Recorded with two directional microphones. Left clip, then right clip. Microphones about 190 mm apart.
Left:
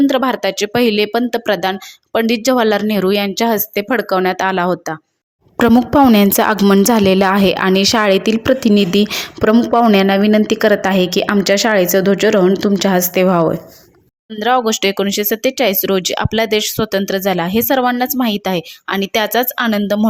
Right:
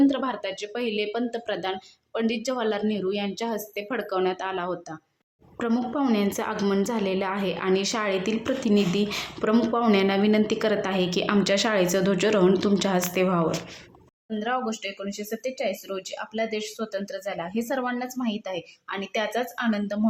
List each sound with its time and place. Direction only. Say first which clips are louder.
0.1 s speech: left 13 dB; 45° left (ahead or behind)
9.5 s a woman's voice: left 11 dB; 30° left (ahead or behind)